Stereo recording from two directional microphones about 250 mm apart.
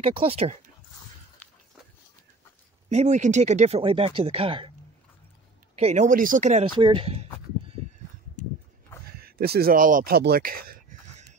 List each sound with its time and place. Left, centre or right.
0.0 s speech: right
2.9 s speech: right
5.8 s speech: right
9.2 s speech: right